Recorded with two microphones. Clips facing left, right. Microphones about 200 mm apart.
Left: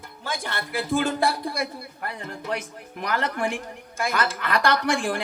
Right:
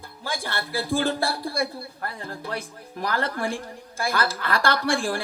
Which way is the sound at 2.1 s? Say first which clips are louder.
Left 3 dB; 20° left (ahead or behind).